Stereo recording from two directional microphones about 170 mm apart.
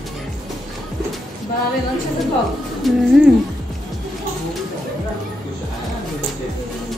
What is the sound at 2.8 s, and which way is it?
Speech, centre (ahead or behind).